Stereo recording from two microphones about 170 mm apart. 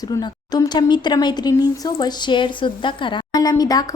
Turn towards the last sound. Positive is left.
turn(degrees=20)  # may be behind; listen again after turning